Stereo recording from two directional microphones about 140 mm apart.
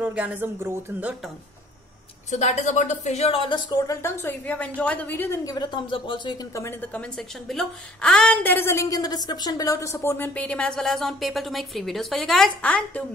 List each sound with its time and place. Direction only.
0.0 s speech: 10° right (ahead or behind)
2.3 s speech: 55° left (ahead or behind); by 6.4 s 35° left (ahead or behind)
6.5 s a woman's voice: 15° left (ahead or behind)